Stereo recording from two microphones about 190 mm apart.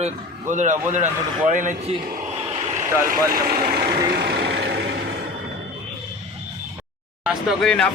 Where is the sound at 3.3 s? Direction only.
55° right (ahead or behind).